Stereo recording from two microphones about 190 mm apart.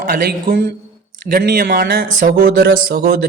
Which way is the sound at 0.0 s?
50° right (ahead or behind).